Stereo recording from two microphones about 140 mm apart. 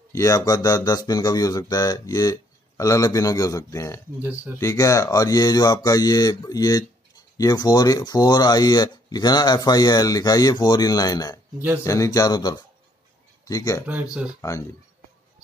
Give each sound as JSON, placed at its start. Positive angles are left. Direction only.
{"t": 0.1, "sound": "speech", "side_deg": 20}
{"t": 13.8, "sound": "speech", "side_deg": -10}